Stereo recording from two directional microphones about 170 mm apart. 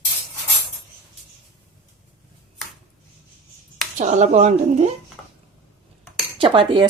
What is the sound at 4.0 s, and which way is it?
Speech, 45° right (ahead or behind).